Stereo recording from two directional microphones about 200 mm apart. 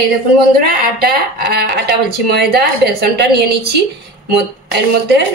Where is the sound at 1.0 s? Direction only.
50° right (ahead or behind).